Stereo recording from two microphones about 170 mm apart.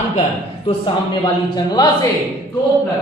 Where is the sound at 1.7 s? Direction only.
20° left (ahead or behind).